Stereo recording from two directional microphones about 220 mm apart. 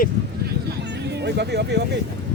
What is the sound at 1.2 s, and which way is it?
Speech, 50° right (ahead or behind).